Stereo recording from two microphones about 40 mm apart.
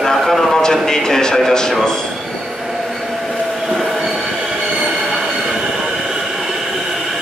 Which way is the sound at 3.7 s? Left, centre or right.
Centre.